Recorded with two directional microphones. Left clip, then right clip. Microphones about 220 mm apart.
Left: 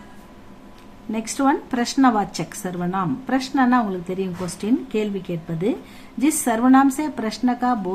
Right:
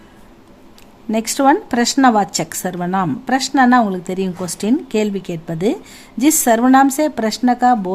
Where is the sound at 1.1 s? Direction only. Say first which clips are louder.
Right 7 dB; 40° right (ahead or behind).